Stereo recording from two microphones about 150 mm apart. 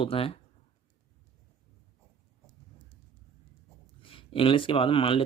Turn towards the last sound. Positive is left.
turn(degrees=35)  # may be behind; listen again after turning